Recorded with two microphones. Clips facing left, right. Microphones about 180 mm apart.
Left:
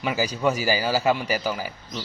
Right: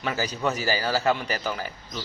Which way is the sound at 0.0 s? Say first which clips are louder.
Left 4 dB; 10° left (ahead or behind).